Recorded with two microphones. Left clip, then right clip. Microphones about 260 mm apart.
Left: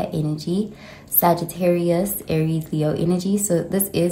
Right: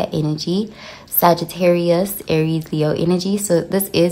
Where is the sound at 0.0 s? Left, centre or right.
Centre.